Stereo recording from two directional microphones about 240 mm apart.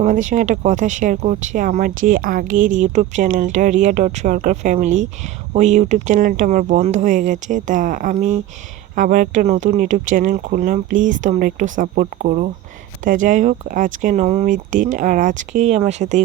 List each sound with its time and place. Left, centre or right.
0.0 s speech: right